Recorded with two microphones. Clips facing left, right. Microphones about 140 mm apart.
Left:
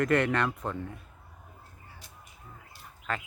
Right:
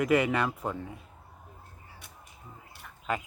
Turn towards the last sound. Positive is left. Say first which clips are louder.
# right 3 dB
turn(degrees=-15)  # may be behind; listen again after turning